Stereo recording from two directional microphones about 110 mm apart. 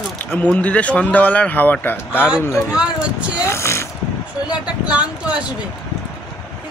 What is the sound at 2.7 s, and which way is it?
Speech, 10° right (ahead or behind).